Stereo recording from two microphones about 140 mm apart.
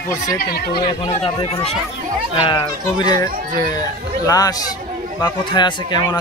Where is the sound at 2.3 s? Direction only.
35° left (ahead or behind).